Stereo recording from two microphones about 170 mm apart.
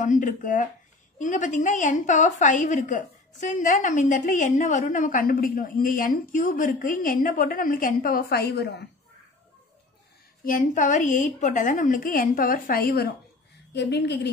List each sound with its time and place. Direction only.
0.0 s a woman's voice: 45° left (ahead or behind); by 8.8 s 75° left (ahead or behind)
10.4 s a woman's voice: 50° left (ahead or behind)
13.7 s a woman's voice: 80° left